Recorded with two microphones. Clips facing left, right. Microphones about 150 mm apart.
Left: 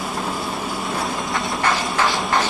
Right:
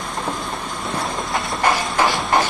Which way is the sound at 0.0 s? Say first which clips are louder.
Left 1 dB; 5° left (ahead or behind).